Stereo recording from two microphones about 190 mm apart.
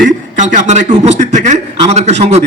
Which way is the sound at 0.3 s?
40° right (ahead or behind).